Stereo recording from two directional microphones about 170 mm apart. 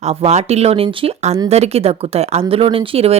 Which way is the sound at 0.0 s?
40° right (ahead or behind).